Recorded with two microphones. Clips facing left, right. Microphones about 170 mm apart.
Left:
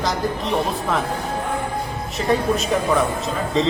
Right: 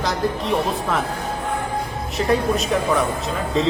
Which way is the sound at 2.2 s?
Centre (ahead or behind).